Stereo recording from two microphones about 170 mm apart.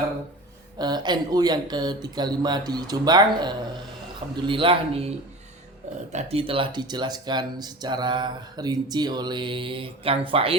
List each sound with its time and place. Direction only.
0.8 s speech: 25° right (ahead or behind)